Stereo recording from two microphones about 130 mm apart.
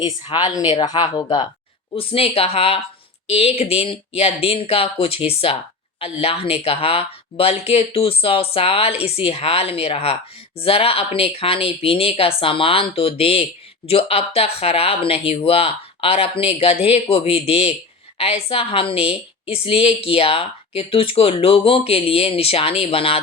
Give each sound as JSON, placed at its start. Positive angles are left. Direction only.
{"t": 0.3, "sound": "speech", "side_deg": 35}